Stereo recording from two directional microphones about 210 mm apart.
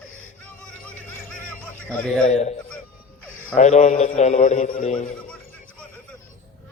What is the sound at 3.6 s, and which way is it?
A man's voice, 35° left (ahead or behind).